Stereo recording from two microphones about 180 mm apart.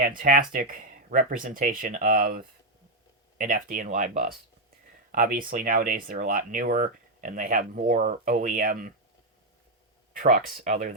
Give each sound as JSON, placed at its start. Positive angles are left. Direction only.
{"t": 0.0, "sound": "speech", "side_deg": -50}
{"t": 10.1, "sound": "speech", "side_deg": -50}